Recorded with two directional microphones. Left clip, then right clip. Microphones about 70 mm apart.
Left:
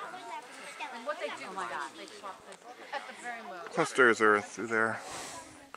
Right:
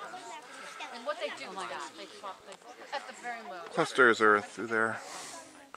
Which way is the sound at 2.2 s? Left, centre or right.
Right.